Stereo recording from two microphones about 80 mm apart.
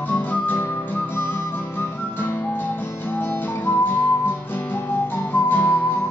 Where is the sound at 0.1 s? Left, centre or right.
Left.